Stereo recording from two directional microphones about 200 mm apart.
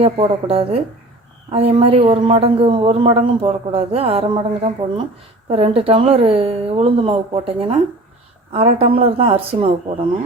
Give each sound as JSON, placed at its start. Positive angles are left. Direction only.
{"t": 0.0, "sound": "speech", "side_deg": -30}